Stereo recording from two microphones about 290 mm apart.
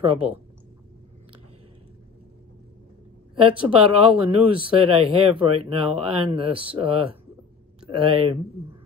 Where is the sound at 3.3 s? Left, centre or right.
Centre.